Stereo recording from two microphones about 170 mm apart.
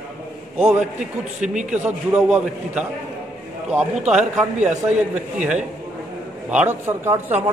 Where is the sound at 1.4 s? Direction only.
5° right (ahead or behind).